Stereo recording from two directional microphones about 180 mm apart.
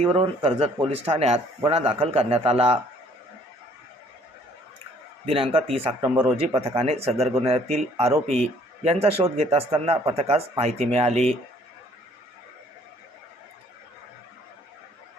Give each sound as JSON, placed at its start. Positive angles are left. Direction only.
{"t": 0.0, "sound": "speech", "side_deg": -35}
{"t": 5.2, "sound": "speech", "side_deg": -30}
{"t": 6.0, "sound": "speech", "side_deg": -15}
{"t": 6.4, "sound": "speech", "side_deg": -30}